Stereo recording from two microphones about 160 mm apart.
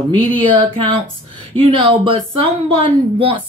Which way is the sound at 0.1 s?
30° right (ahead or behind).